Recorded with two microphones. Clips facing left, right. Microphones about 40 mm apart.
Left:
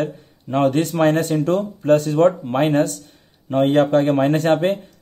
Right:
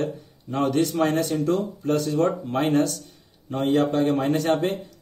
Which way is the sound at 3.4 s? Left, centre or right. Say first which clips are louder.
Left 6 dB; left.